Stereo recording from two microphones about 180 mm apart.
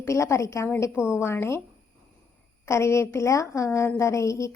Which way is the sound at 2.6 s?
15° left (ahead or behind).